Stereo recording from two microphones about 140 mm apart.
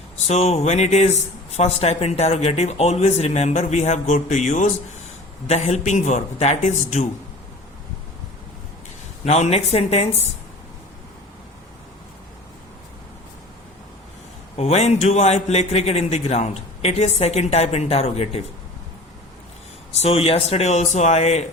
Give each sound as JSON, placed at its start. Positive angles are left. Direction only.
{"t": 0.3, "sound": "a man's voice", "side_deg": 50}
{"t": 9.2, "sound": "a man's voice", "side_deg": 50}
{"t": 14.5, "sound": "a man's voice", "side_deg": 50}
{"t": 20.0, "sound": "a man's voice", "side_deg": 45}